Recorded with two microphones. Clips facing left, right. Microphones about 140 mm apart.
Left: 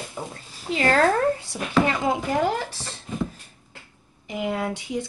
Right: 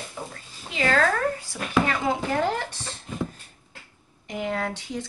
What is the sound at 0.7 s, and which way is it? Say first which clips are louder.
Speech: left 3 dB; 40° left (ahead or behind).